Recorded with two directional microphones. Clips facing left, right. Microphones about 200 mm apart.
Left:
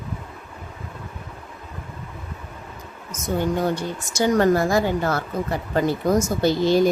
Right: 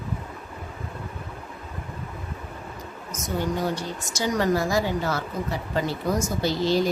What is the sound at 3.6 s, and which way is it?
Speech, 55° left (ahead or behind).